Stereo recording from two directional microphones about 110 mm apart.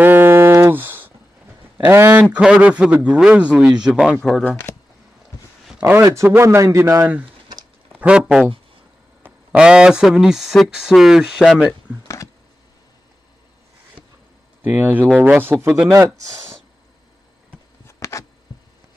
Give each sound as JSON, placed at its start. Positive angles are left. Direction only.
{"t": 0.0, "sound": "a sound", "side_deg": -20}
{"t": 2.3, "sound": "a man's voice", "side_deg": -10}
{"t": 4.2, "sound": "speech", "side_deg": 5}
{"t": 6.0, "sound": "a man's voice", "side_deg": -25}
{"t": 8.0, "sound": "a man's voice", "side_deg": -10}
{"t": 9.6, "sound": "speech", "side_deg": -10}
{"t": 14.6, "sound": "a man's voice", "side_deg": -15}
{"t": 17.8, "sound": "a sound", "side_deg": 25}